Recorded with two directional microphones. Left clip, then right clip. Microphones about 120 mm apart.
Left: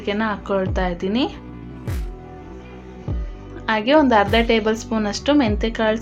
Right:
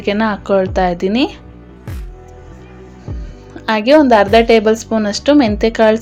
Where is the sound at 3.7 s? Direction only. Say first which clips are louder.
Right 6 dB; 40° right (ahead or behind).